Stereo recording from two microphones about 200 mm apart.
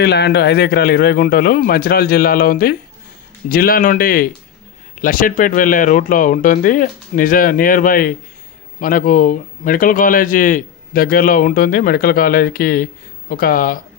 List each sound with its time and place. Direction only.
0.0 s speech: 55° left (ahead or behind)